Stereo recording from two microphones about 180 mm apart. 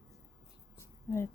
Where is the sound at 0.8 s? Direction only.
15° left (ahead or behind).